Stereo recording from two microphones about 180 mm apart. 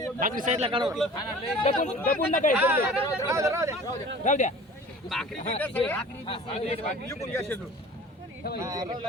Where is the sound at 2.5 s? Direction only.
10° right (ahead or behind).